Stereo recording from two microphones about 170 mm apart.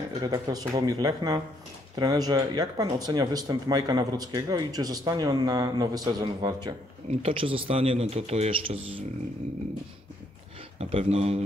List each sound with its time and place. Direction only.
0.2 s speech: 25° right (ahead or behind)
7.1 s speech: 35° right (ahead or behind)
10.8 s speech: 35° right (ahead or behind)